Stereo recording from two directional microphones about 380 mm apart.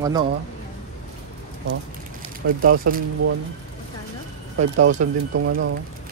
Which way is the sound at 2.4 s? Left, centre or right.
Right.